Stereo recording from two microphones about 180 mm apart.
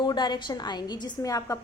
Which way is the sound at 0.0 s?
25° left (ahead or behind).